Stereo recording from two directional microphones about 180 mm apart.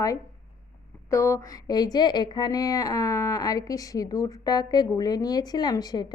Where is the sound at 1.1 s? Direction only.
15° left (ahead or behind).